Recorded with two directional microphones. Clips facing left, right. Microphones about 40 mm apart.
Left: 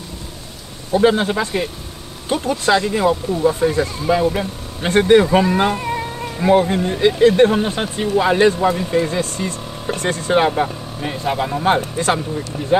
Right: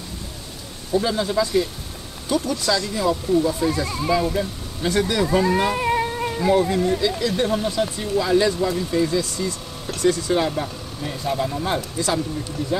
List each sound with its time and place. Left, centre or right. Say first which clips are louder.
0.9 s speech: left 5 dB; left
5.8 s cat: right 2 dB; centre
6.4 s speech: left 4 dB; left